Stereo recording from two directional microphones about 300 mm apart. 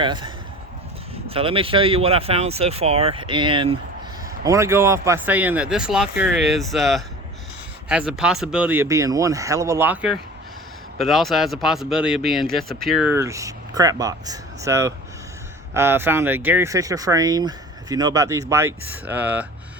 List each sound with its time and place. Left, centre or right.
0.0 s speech: centre
1.3 s speech: centre